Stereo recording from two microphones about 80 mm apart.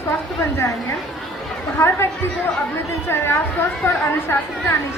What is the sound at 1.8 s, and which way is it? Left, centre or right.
A woman's voice, left.